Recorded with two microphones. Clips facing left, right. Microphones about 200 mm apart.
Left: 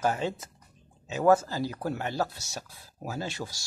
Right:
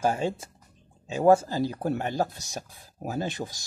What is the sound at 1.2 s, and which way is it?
Speech, 30° right (ahead or behind).